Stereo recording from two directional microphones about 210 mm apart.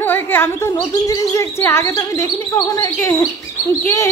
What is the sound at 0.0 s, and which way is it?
Speech, 10° left (ahead or behind).